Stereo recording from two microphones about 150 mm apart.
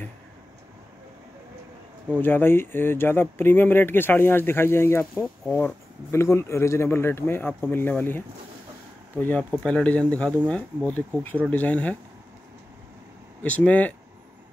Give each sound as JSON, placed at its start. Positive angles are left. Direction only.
{"t": 2.1, "sound": "speech", "side_deg": 15}
{"t": 13.4, "sound": "speech", "side_deg": 10}